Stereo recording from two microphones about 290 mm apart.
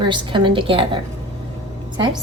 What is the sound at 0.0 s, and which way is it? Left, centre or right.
Speech, centre.